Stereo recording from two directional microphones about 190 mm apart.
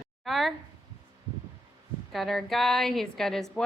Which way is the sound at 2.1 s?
Centre (ahead or behind).